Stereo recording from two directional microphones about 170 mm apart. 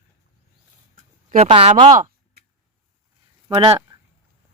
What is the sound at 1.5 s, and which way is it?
Speech, 35° right (ahead or behind).